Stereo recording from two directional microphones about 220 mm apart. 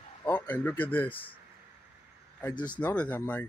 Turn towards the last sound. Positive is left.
turn(degrees=10)  # may be behind; listen again after turning